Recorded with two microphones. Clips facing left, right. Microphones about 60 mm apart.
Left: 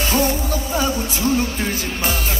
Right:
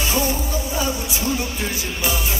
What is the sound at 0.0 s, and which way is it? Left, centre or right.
Music, left.